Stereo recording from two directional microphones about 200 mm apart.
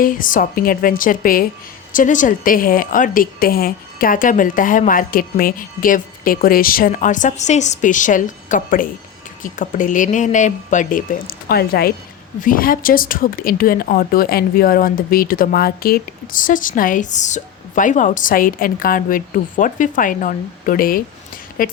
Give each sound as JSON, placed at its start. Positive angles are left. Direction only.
{"t": 0.0, "sound": "speech", "side_deg": 45}
{"t": 11.4, "sound": "speech", "side_deg": 50}